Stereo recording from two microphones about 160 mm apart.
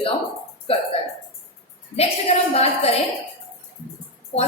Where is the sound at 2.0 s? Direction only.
40° left (ahead or behind).